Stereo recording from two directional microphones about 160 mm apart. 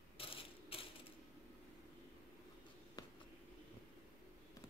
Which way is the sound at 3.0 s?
25° left (ahead or behind).